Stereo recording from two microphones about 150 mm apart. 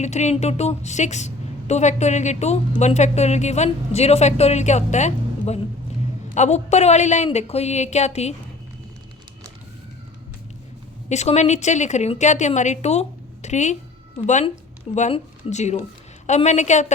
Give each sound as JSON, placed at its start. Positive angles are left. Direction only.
{"t": 0.0, "sound": "a woman's voice", "side_deg": 50}
{"t": 11.1, "sound": "a woman's voice", "side_deg": 50}
{"t": 15.1, "sound": "a woman's voice", "side_deg": 50}